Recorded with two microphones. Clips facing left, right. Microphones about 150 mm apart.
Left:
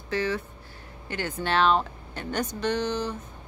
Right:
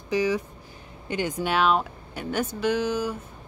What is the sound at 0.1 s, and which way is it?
Speech, 15° right (ahead or behind).